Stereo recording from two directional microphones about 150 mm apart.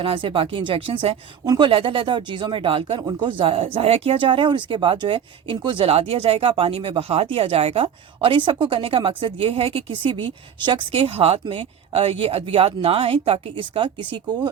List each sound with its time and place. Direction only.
0.0 s speech: 35° right (ahead or behind)